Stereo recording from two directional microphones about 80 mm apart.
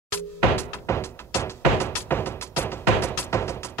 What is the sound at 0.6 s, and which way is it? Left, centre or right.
Music, left.